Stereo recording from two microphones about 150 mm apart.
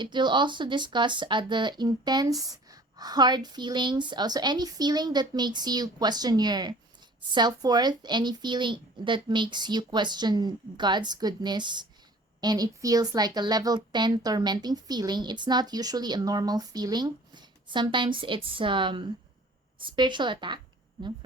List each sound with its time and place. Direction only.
0.0 s a woman's voice: 30° right (ahead or behind)